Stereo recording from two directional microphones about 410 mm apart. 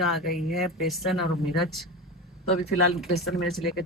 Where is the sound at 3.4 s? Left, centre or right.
Centre.